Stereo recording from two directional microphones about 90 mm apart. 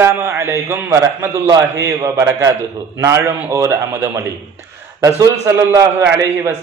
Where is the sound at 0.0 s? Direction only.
30° right (ahead or behind).